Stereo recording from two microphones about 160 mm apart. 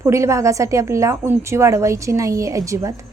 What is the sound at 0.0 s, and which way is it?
A woman's voice, 20° right (ahead or behind).